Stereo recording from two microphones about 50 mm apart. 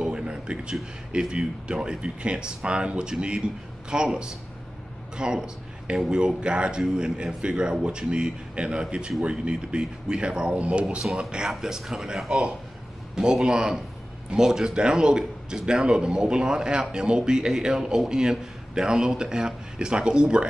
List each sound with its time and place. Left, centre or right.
0.0 s a sound: right
1.1 s a man's voice: centre
11.4 s a man's voice: centre